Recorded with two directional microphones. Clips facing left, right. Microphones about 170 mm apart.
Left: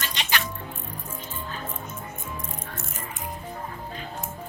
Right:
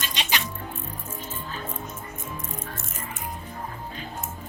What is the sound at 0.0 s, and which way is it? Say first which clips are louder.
Music: even; 15° right (ahead or behind).